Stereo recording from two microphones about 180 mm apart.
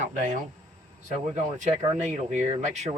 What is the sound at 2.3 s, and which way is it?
Speech, 40° right (ahead or behind).